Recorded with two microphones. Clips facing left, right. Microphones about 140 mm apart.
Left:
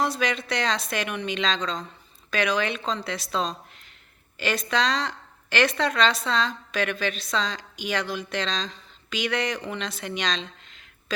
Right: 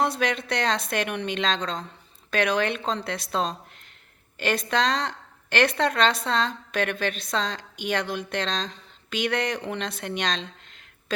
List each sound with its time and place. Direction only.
0.0 s a woman's voice: 60° right (ahead or behind)